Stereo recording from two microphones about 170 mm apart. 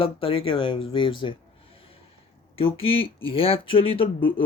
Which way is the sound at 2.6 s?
35° left (ahead or behind).